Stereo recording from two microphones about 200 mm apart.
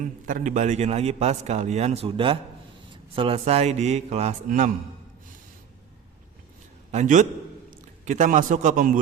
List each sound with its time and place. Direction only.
0.0 s a man's voice: 40° right (ahead or behind)
6.9 s a man's voice: 40° right (ahead or behind)